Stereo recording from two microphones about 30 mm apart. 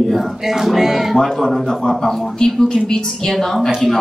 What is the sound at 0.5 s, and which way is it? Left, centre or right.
Speech, centre.